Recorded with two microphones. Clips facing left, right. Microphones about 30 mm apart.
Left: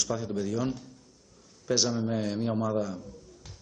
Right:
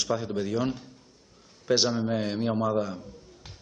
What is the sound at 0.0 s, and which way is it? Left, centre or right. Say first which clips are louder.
A man's voice: right 2 dB; right.